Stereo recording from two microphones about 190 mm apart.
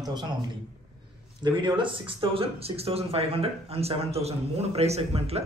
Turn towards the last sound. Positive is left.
turn(degrees=-30)  # may be behind; listen again after turning